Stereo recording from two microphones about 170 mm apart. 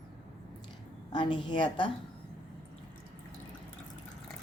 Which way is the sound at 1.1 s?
30° left (ahead or behind).